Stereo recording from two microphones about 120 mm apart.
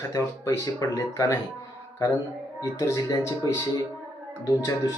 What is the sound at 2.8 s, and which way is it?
Speech, 25° left (ahead or behind).